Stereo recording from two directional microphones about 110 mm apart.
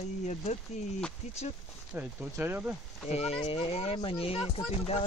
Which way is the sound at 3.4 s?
55° left (ahead or behind).